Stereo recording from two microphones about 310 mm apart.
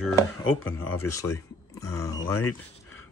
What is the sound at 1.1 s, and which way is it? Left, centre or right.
Speech, centre.